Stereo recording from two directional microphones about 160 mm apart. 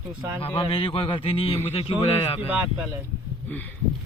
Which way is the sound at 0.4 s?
35° left (ahead or behind).